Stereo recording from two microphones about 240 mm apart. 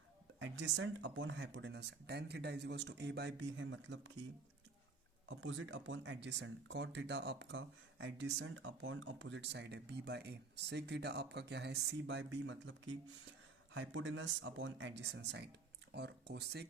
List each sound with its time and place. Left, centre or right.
0.3 s speech: right
5.3 s speech: right